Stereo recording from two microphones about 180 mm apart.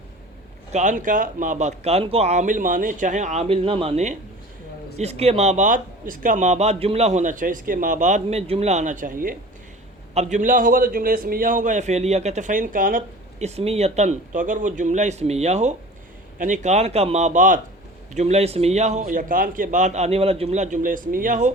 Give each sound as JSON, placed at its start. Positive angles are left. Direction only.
{"t": 0.7, "sound": "speech", "side_deg": -45}
{"t": 13.4, "sound": "speech", "side_deg": -35}